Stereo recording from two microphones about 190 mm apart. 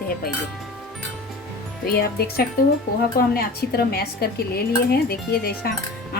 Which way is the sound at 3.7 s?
55° left (ahead or behind).